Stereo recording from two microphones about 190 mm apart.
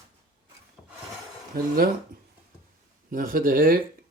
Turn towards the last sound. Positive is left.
turn(degrees=-50)  # may be behind; listen again after turning